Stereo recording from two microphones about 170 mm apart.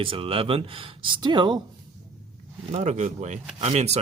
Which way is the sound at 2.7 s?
45° right (ahead or behind).